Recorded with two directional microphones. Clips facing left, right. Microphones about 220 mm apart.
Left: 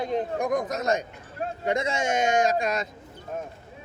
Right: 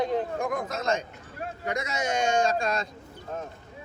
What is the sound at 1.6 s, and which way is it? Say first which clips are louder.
Speech: left 4 dB; 25° left (ahead or behind).